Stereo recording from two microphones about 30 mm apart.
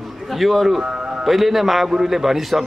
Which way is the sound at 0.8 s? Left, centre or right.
Right.